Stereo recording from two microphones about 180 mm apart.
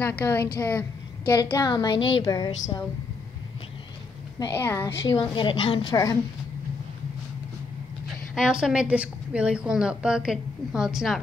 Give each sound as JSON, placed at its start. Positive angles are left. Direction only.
{"t": 0.0, "sound": "a woman's voice", "side_deg": 10}
{"t": 1.2, "sound": "a woman's voice", "side_deg": 20}
{"t": 4.6, "sound": "a woman's voice", "side_deg": 10}
{"t": 5.0, "sound": "a woman's voice", "side_deg": 25}
{"t": 8.4, "sound": "a woman's voice", "side_deg": -5}